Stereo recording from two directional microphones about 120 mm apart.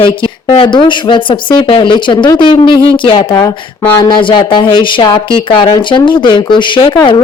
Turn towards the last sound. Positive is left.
turn(degrees=40)  # may be behind; listen again after turning